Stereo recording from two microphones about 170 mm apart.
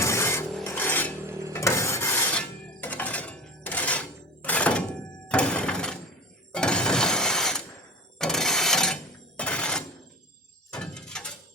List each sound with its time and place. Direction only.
0.0 s wood: 15° left (ahead or behind)
0.5 s a sound: 10° left (ahead or behind)
1.2 s dishes: 15° right (ahead or behind)
1.5 s a sound: 15° left (ahead or behind)
4.4 s thunk: 5° left (ahead or behind)
6.5 s shatter: 5° left (ahead or behind)
8.2 s a sound: centre (ahead or behind)
9.4 s telephone bell ringing: 5° left (ahead or behind)
10.7 s door: 5° left (ahead or behind)